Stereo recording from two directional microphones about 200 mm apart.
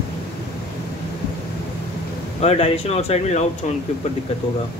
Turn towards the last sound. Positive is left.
turn(degrees=35)  # may be behind; listen again after turning